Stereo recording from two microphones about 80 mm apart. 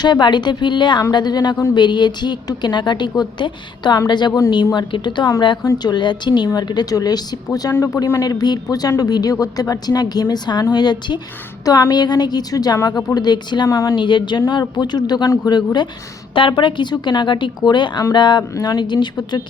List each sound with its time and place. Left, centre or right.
0.0 s a woman's voice: left
1.1 s a woman's voice: left
7.8 s a man's voice: left
8.2 s a woman's voice: left
13.1 s a woman's voice: left
13.7 s a woman's voice: left
13.9 s a woman's voice: left
16.3 s a woman's voice: left
18.5 s a woman's voice: left